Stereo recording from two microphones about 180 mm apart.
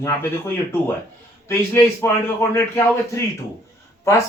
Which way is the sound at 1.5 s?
10° left (ahead or behind).